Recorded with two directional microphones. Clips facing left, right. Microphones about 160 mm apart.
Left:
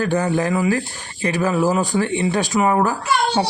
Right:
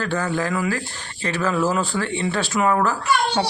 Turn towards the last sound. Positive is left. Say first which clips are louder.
# left 2 dB
turn(degrees=15)  # may be behind; listen again after turning